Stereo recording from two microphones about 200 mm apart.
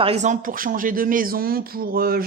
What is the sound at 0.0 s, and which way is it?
Speech, 30° right (ahead or behind).